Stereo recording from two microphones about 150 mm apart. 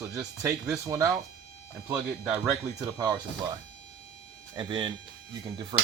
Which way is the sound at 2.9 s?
25° right (ahead or behind).